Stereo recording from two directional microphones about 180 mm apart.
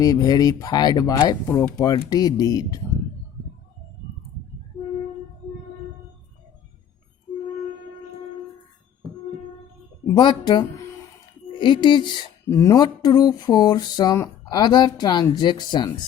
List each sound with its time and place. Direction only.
0.0 s speech: 20° left (ahead or behind)
1.5 s speech: 10° left (ahead or behind)
1.8 s speech: 20° left (ahead or behind)
10.2 s speech: 25° left (ahead or behind)